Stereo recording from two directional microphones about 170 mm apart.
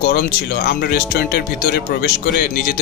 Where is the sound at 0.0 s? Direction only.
60° left (ahead or behind).